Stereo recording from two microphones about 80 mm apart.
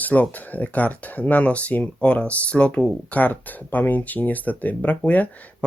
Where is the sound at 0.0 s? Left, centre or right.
Left.